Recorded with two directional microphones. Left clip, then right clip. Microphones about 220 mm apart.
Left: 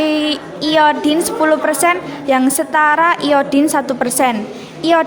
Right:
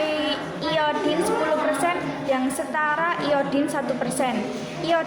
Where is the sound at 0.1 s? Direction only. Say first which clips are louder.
Left 7 dB; 55° left (ahead or behind).